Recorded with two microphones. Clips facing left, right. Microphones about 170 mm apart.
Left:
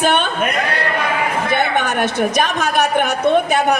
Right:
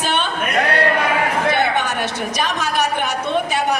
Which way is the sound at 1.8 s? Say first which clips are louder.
Left 4 dB; 55° left (ahead or behind).